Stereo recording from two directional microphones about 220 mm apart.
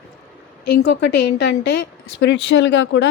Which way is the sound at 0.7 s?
50° left (ahead or behind).